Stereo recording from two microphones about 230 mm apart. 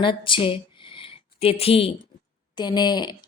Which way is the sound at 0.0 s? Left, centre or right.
Left.